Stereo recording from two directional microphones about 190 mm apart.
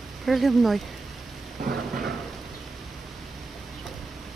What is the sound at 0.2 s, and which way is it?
Speech, centre (ahead or behind).